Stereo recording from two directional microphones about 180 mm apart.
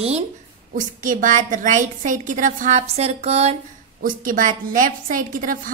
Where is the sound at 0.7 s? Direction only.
45° right (ahead or behind).